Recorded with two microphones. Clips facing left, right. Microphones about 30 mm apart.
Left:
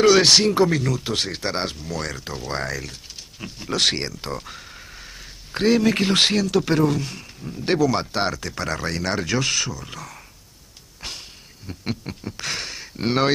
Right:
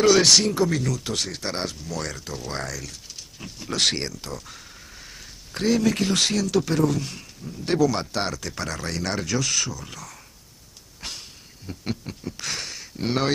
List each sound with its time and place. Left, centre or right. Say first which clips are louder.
0.0 s speech: left 2 dB; centre
4.2 s speech: left 5 dB; left
7.0 s speech: left 2 dB; centre
7.4 s speech: left 3 dB; left
7.8 s speech: even; centre
9.3 s speech: left 2 dB; left
9.6 s speech: left 2 dB; centre
11.0 s a sound: left 2 dB; centre
12.0 s speech: left 2 dB; left